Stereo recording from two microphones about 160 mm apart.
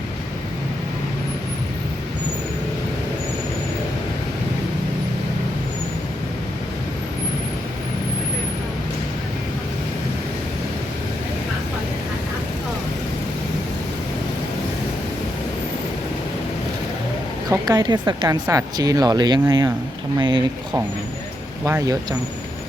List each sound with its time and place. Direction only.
17.5 s speech: 25° right (ahead or behind)
21.6 s speech: 20° right (ahead or behind)